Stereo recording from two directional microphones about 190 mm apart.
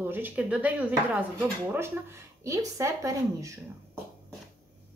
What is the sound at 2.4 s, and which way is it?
A woman's voice, 15° right (ahead or behind).